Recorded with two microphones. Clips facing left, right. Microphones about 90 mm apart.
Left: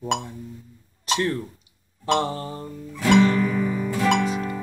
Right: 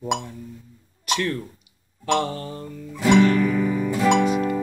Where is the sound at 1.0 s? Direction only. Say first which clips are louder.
Left 1 dB; 30° left (ahead or behind).